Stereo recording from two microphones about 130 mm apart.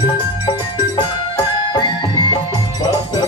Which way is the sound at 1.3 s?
35° left (ahead or behind).